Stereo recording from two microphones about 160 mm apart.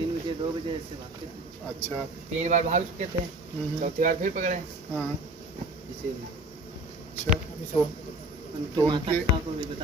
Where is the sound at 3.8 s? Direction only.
55° right (ahead or behind).